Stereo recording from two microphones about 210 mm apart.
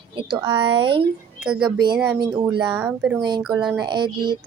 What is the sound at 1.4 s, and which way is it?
Speech, 5° right (ahead or behind).